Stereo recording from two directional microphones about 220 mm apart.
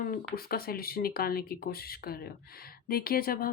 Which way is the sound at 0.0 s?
40° left (ahead or behind).